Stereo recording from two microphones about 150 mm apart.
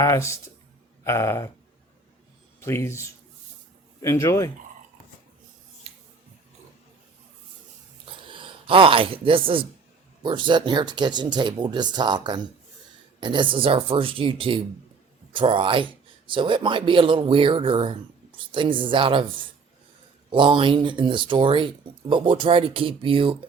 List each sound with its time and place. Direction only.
0.0 s a man's voice: 20° left (ahead or behind)
2.6 s a man's voice: 15° left (ahead or behind)
8.0 s a sound: 35° right (ahead or behind)
10.2 s speech: 30° right (ahead or behind)